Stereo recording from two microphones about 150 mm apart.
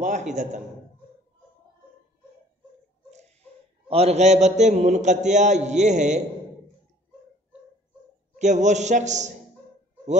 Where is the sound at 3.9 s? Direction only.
45° right (ahead or behind).